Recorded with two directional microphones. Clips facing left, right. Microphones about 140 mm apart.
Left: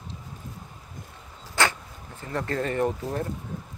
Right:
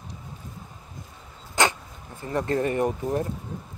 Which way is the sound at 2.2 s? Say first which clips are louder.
Right 4 dB; 20° right (ahead or behind).